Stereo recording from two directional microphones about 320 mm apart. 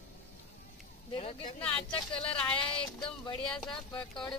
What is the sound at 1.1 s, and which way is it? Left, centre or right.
Speech, centre.